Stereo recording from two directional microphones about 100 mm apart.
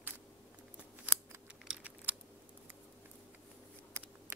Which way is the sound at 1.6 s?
5° right (ahead or behind).